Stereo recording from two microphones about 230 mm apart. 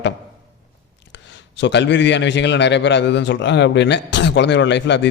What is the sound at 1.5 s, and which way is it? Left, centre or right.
A man's voice, left.